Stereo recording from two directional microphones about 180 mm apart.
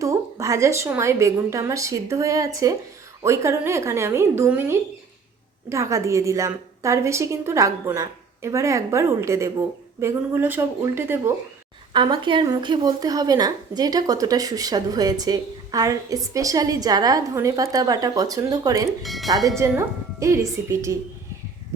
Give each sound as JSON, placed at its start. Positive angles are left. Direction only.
{"t": 0.0, "sound": "a woman's voice", "side_deg": -15}
{"t": 11.9, "sound": "speech", "side_deg": -25}
{"t": 19.0, "sound": "speech", "side_deg": 0}
{"t": 19.5, "sound": "a woman's voice", "side_deg": -15}